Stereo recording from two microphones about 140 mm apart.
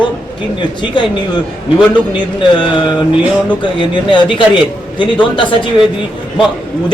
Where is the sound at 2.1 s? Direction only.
35° left (ahead or behind).